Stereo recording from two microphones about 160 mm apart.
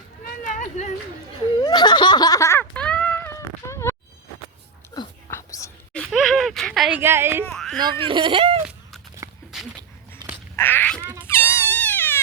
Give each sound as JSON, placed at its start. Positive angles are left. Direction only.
{"t": 0.4, "sound": "a sound", "side_deg": 50}
{"t": 1.6, "sound": "snicker", "side_deg": 25}
{"t": 2.7, "sound": "cat", "side_deg": 5}
{"t": 4.9, "sound": "dog", "side_deg": 30}
{"t": 5.3, "sound": "whispering", "side_deg": 20}
{"t": 5.9, "sound": "a sound", "side_deg": 0}
{"t": 7.0, "sound": "a woman's voice", "side_deg": -15}
{"t": 7.4, "sound": "a child's voice", "side_deg": 5}
{"t": 7.8, "sound": "speech", "side_deg": -30}
{"t": 9.2, "sound": "a sound", "side_deg": -20}
{"t": 10.6, "sound": "cat", "side_deg": 15}
{"t": 11.0, "sound": "a sound", "side_deg": -15}
{"t": 11.6, "sound": "frog", "side_deg": 10}